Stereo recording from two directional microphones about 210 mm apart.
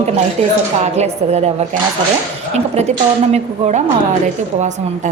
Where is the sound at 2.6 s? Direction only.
30° right (ahead or behind).